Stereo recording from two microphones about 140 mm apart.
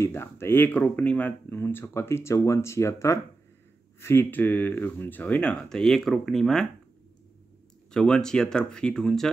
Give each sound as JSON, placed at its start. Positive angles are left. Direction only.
{"t": 0.0, "sound": "speech", "side_deg": 20}
{"t": 7.9, "sound": "speech", "side_deg": 5}